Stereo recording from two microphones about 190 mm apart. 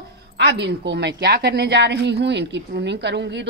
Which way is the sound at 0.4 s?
65° right (ahead or behind).